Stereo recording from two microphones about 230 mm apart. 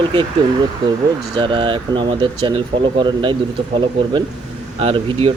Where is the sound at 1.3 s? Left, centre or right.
Right.